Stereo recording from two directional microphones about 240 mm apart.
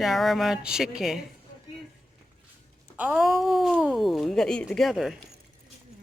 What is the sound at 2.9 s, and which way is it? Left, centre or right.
Speech, centre.